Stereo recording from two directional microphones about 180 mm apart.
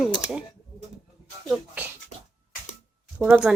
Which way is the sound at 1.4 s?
5° right (ahead or behind).